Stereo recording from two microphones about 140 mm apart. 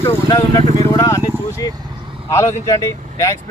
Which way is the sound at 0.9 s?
25° left (ahead or behind).